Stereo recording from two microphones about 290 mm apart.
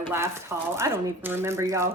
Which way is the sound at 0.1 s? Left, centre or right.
Centre.